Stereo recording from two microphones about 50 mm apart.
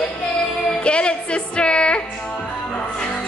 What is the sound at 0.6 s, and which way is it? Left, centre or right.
Music, left.